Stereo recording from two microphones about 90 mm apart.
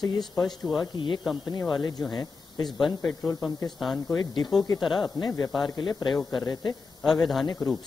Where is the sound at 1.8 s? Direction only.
50° left (ahead or behind).